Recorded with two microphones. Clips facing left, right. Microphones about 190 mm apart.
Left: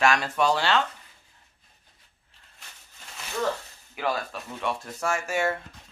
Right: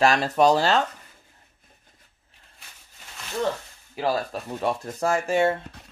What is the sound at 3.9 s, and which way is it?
Speech, 35° right (ahead or behind).